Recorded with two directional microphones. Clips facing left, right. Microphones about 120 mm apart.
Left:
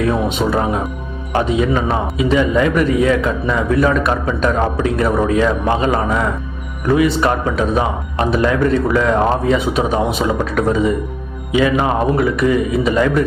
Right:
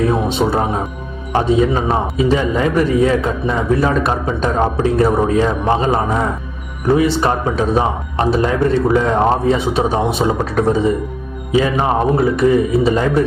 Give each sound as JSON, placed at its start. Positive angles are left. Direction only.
{"t": 0.1, "sound": "a man's voice", "side_deg": -30}